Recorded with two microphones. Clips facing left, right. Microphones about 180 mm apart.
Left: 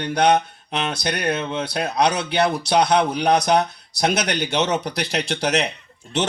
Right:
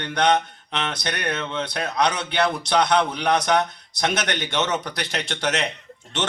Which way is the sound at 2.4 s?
30° left (ahead or behind).